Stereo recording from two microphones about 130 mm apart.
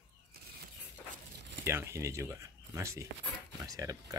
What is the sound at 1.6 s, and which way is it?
Speech, 20° right (ahead or behind).